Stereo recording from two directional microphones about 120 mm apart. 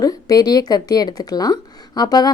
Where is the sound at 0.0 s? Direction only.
30° left (ahead or behind).